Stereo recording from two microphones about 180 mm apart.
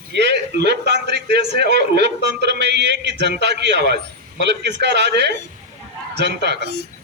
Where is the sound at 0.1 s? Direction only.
70° right (ahead or behind).